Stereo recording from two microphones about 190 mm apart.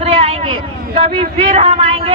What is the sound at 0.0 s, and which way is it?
Speech, 30° right (ahead or behind).